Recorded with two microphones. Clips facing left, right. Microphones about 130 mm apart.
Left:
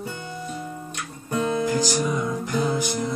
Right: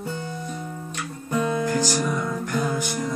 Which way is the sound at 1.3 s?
15° left (ahead or behind).